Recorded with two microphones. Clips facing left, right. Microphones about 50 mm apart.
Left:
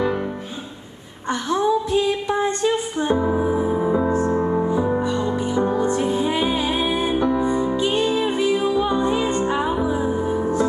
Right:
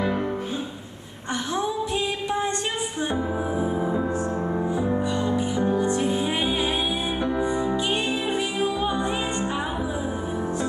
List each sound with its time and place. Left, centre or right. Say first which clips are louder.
2.0 s music: left 5 dB; left
7.2 s music: left 5 dB; right
7.4 s music: left 4 dB; left
7.7 s music: left 5 dB; right
8.1 s music: left 5 dB; left
8.4 s music: left 6 dB; right
9.2 s music: left 6 dB; left